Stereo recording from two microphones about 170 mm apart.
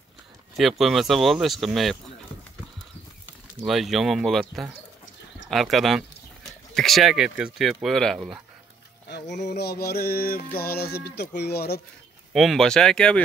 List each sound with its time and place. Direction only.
0.6 s speech: centre (ahead or behind)
3.6 s speech: centre (ahead or behind)
9.1 s mantra: 80° left
12.3 s speech: centre (ahead or behind)